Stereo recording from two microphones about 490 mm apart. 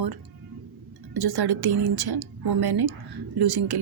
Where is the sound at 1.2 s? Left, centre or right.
Right.